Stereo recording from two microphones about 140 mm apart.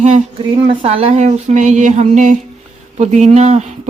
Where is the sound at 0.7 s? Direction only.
40° right (ahead or behind).